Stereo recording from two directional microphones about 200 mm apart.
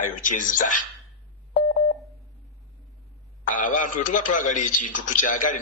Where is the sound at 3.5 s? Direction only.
40° left (ahead or behind).